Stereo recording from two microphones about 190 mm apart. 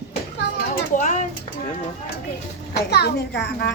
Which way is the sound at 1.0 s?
40° left (ahead or behind).